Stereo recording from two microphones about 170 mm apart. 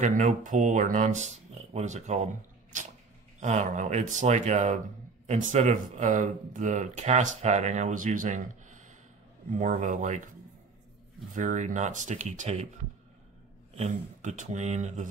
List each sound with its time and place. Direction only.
0.0 s speech: 45° right (ahead or behind)
11.3 s speech: 45° right (ahead or behind)
13.7 s speech: 45° right (ahead or behind)